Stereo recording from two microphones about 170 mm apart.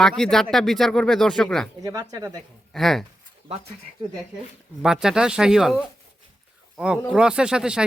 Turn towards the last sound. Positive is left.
turn(degrees=-5)  # may be behind; listen again after turning